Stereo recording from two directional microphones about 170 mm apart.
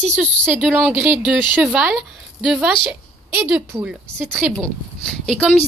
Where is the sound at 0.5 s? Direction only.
10° right (ahead or behind).